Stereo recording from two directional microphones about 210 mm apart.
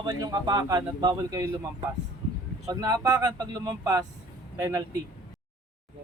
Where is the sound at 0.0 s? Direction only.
20° right (ahead or behind).